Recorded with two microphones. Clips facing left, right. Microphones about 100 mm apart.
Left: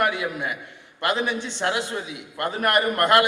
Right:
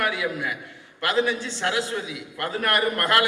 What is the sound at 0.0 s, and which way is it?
A woman's voice, 25° left (ahead or behind).